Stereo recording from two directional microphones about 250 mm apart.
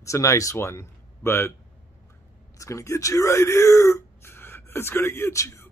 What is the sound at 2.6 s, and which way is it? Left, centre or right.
Speech, centre.